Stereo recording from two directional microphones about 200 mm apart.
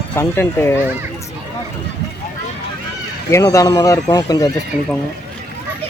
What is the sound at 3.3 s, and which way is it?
Speech, 15° left (ahead or behind).